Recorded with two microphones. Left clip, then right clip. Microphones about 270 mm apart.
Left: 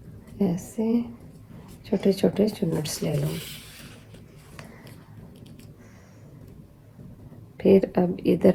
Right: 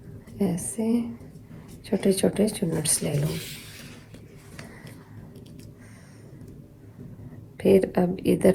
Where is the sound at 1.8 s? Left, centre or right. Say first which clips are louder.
Even; right.